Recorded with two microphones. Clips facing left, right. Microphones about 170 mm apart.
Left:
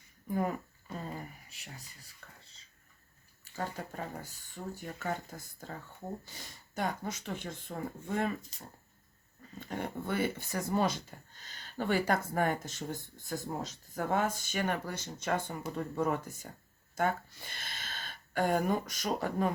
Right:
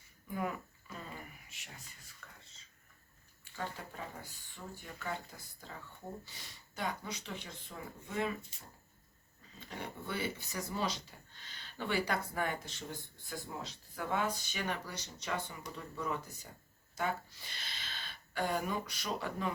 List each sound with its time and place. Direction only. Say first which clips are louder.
0.3 s a sound: left 5 dB; 40° left (ahead or behind)
3.5 s speech: left 4 dB; 45° left (ahead or behind)
9.6 s speech: left 7 dB; 50° left (ahead or behind)